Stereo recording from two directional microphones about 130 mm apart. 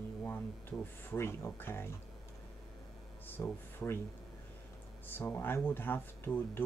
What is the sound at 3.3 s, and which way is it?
Speech, 20° left (ahead or behind).